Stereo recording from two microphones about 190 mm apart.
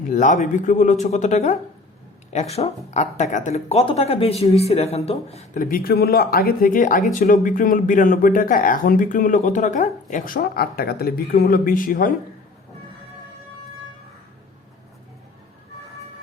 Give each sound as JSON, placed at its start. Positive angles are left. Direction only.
{"t": 0.1, "sound": "speech", "side_deg": 40}